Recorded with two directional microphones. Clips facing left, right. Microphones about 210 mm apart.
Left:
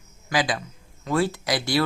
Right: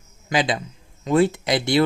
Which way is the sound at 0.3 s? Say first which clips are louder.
Right 3 dB; 25° right (ahead or behind).